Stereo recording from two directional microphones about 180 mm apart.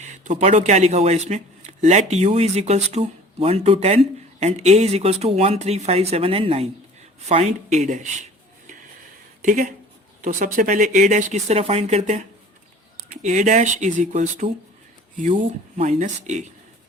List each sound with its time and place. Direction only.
0.0 s speech: 40° right (ahead or behind)